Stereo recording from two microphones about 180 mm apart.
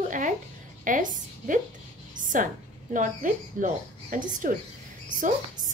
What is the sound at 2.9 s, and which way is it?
A woman's voice, 45° right (ahead or behind).